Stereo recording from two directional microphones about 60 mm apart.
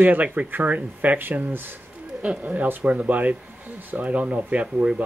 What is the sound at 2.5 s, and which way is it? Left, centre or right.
Speech, right.